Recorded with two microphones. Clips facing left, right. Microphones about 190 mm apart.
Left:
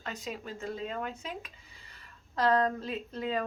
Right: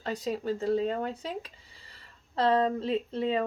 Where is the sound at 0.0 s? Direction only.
35° right (ahead or behind).